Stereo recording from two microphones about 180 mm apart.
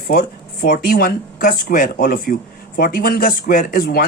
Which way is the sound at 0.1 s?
55° left (ahead or behind).